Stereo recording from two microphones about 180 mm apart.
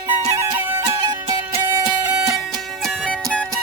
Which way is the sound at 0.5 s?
20° right (ahead or behind).